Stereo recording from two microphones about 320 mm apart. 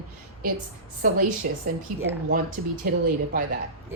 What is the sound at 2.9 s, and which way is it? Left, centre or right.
Speech, right.